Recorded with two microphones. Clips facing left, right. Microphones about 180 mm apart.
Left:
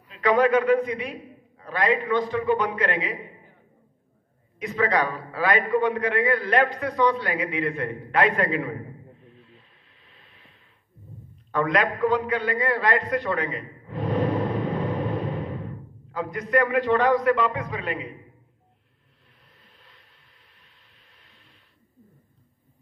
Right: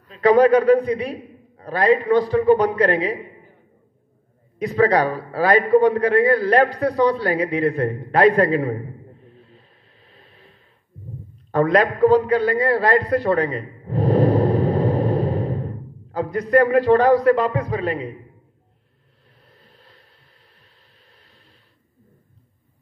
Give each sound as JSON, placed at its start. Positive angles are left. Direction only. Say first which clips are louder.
{"t": 0.1, "sound": "a man's voice", "louder": "right 6 dB", "side_deg": -35}
{"t": 4.6, "sound": "a man's voice", "louder": "right 7 dB", "side_deg": -35}
{"t": 9.2, "sound": "a sound", "louder": "right 3 dB", "side_deg": -40}
{"t": 11.5, "sound": "a man's voice", "louder": "right 6 dB", "side_deg": -35}
{"t": 19.6, "sound": "a sound", "louder": "right 5 dB", "side_deg": -35}
{"t": 21.2, "sound": "printer", "louder": "right 4 dB", "side_deg": -35}